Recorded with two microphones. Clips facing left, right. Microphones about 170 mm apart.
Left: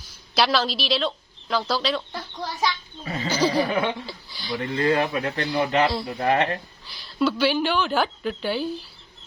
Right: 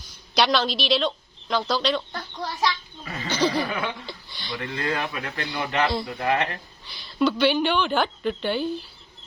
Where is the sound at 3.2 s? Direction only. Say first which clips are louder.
Left 2 dB; 10° left (ahead or behind).